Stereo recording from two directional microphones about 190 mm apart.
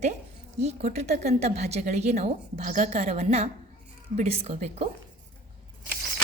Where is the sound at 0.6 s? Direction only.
35° right (ahead or behind).